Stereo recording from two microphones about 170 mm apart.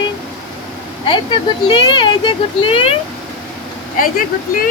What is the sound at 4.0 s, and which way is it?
Speech, 55° left (ahead or behind).